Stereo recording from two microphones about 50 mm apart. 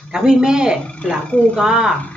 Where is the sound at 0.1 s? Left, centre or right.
Centre.